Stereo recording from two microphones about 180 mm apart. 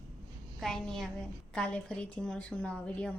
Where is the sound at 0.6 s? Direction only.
Centre (ahead or behind).